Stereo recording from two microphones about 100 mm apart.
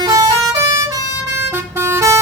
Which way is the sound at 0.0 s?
35° right (ahead or behind).